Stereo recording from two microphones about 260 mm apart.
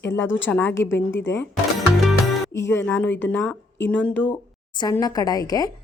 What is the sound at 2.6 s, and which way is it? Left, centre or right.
Speech, centre.